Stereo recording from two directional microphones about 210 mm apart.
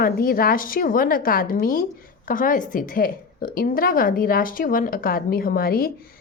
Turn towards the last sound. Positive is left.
turn(degrees=45)  # may be behind; listen again after turning